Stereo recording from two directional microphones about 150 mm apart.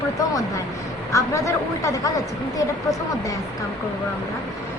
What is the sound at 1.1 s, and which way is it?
Speech, 20° left (ahead or behind).